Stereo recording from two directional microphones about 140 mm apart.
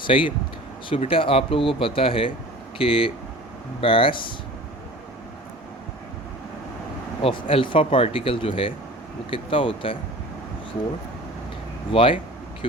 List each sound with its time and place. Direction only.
0.0 s speech: 35° left (ahead or behind)
7.2 s speech: 40° left (ahead or behind)
11.9 s speech: 35° left (ahead or behind)